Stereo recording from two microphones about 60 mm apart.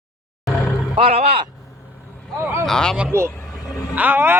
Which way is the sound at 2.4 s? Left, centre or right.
Right.